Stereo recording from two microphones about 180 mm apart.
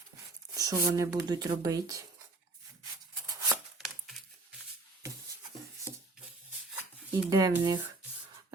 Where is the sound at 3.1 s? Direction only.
20° right (ahead or behind).